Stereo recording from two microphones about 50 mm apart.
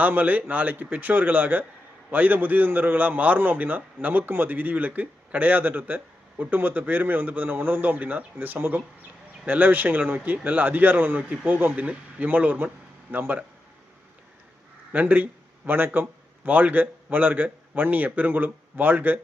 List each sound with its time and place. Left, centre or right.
0.0 s a man's voice: right
14.9 s a man's voice: right